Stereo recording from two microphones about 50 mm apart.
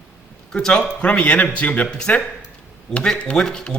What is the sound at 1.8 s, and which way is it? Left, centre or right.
A man's voice, centre.